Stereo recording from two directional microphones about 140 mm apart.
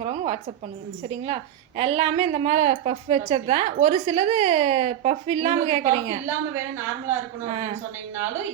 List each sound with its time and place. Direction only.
0.0 s a woman's voice: 50° right (ahead or behind)
7.5 s a woman's voice: 50° right (ahead or behind)